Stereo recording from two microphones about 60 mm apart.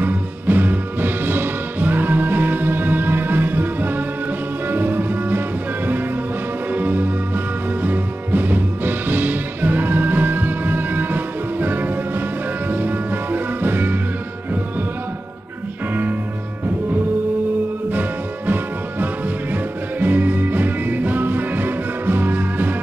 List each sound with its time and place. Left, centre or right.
0.0 s music: right
6.7 s music: right
15.9 s music: right
19.5 s music: right